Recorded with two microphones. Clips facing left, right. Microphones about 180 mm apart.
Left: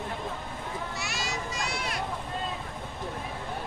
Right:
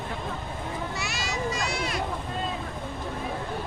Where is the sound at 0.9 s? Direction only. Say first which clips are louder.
Right 3 dB; 90° right.